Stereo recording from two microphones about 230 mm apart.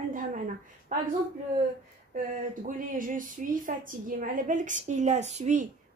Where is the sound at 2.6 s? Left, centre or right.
Right.